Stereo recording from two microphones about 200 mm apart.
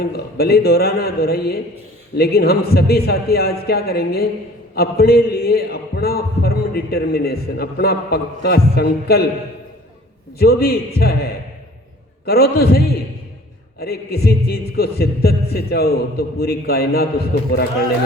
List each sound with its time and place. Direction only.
0.0 s a man's voice: 50° left (ahead or behind)
10.3 s a man's voice: 50° left (ahead or behind)